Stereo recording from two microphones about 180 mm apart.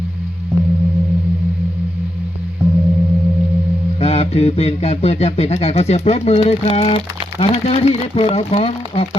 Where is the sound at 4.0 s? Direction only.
35° left (ahead or behind).